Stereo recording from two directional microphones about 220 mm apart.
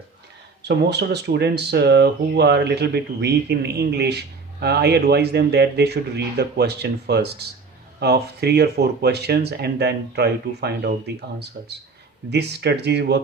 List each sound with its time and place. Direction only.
0.6 s speech: 50° right (ahead or behind)